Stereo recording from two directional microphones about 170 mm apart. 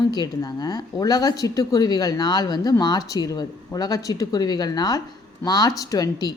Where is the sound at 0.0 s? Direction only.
25° left (ahead or behind).